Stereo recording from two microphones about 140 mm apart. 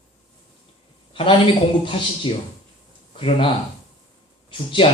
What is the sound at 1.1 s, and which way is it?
A woman's voice, 40° left (ahead or behind).